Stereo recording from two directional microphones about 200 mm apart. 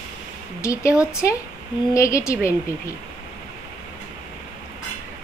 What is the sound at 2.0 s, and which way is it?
Speech, 15° left (ahead or behind).